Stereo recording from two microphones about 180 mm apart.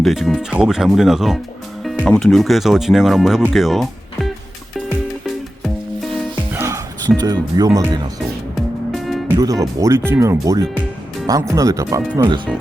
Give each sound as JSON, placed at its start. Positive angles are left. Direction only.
{"t": 0.0, "sound": "speech", "side_deg": 0}
{"t": 6.5, "sound": "music", "side_deg": -15}
{"t": 7.2, "sound": "speech", "side_deg": -20}
{"t": 8.5, "sound": "music", "side_deg": 0}
{"t": 9.4, "sound": "speech", "side_deg": -20}